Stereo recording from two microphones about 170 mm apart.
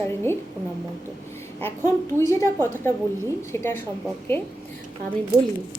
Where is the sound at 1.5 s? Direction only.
15° left (ahead or behind).